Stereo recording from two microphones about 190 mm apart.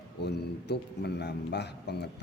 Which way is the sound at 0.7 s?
60° left (ahead or behind).